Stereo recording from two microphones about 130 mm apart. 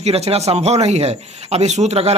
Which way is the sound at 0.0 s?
55° right (ahead or behind).